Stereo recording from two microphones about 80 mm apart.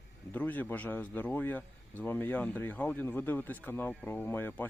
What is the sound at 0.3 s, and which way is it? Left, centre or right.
Speech, left.